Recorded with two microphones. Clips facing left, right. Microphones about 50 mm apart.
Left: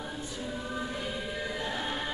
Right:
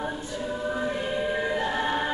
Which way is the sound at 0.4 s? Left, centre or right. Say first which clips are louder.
Right 7 dB; right.